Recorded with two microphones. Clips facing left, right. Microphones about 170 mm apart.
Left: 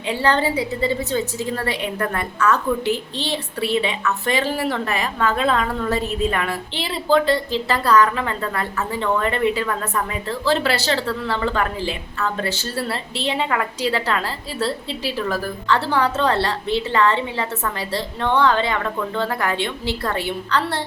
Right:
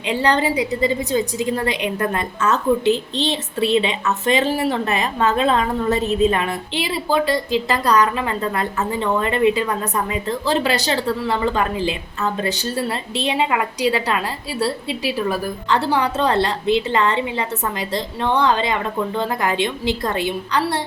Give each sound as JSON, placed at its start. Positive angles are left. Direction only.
{"t": 0.0, "sound": "a woman's voice", "side_deg": -20}